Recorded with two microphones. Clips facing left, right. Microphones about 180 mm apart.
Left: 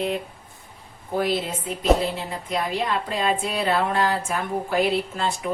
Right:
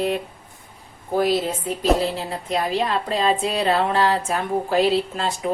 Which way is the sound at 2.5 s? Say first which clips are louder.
Right 3 dB; 35° right (ahead or behind).